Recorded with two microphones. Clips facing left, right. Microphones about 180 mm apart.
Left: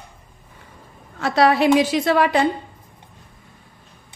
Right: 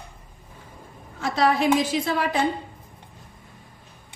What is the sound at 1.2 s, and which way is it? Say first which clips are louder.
A woman's voice: left 5 dB; 70° left (ahead or behind).